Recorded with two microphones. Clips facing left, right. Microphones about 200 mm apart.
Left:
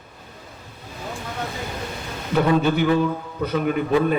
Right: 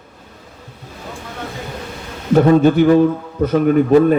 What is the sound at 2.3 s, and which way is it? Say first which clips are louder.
A man's voice: right 8 dB; 45° right (ahead or behind).